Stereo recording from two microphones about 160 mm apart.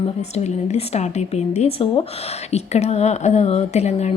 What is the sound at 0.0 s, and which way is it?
A woman's voice, 40° left (ahead or behind).